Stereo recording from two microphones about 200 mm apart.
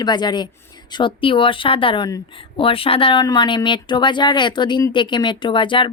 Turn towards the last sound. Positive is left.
turn(degrees=25)  # may be behind; listen again after turning